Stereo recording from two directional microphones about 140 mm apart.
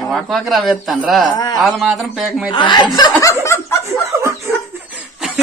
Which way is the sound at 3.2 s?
20° left (ahead or behind).